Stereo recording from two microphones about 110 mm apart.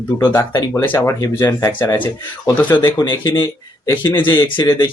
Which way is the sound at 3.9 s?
15° left (ahead or behind).